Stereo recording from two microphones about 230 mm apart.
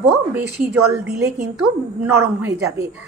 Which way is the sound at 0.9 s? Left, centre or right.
Centre.